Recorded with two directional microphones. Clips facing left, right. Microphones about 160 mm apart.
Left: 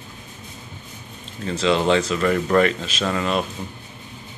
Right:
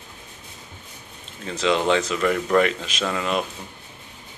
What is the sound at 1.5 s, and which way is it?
Speech, 15° right (ahead or behind).